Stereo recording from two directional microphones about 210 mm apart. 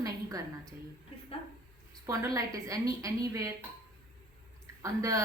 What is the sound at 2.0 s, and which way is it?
A woman's voice, 15° right (ahead or behind).